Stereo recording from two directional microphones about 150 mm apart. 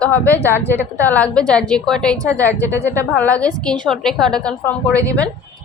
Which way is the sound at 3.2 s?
10° left (ahead or behind).